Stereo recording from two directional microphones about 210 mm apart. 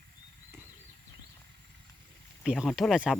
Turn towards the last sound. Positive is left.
turn(degrees=0)  # may be behind; listen again after turning